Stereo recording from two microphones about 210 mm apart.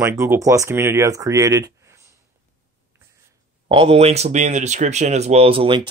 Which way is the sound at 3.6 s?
25° right (ahead or behind).